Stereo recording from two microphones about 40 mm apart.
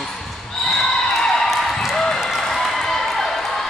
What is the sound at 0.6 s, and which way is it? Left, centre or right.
Basketball bounce, centre.